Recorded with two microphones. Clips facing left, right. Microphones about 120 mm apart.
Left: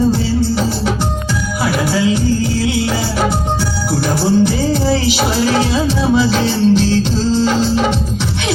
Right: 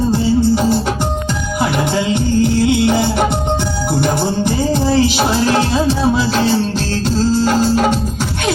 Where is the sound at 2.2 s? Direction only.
60° right (ahead or behind).